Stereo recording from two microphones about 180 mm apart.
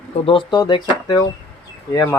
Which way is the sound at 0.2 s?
30° left (ahead or behind).